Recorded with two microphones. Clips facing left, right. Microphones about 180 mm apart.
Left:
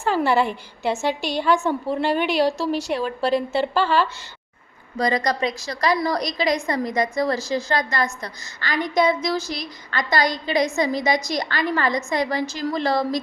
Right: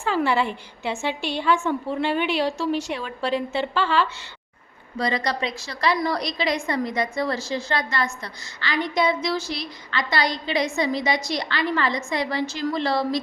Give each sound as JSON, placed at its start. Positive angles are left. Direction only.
{"t": 0.0, "sound": "a woman's voice", "side_deg": 40}